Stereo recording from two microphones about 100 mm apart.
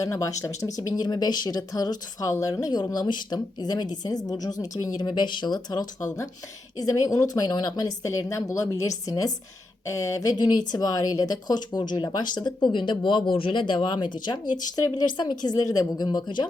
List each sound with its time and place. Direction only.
0.0 s speech: 35° left (ahead or behind)